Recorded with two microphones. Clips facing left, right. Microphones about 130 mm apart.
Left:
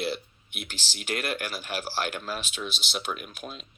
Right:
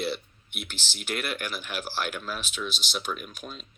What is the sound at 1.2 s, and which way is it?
Speech, 45° left (ahead or behind).